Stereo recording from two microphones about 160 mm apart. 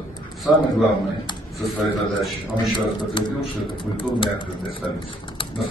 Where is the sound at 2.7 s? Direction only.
30° left (ahead or behind).